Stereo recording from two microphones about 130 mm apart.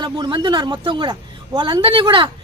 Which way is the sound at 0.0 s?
35° right (ahead or behind).